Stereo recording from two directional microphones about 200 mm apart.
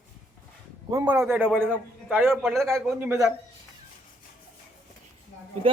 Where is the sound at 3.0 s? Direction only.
10° right (ahead or behind).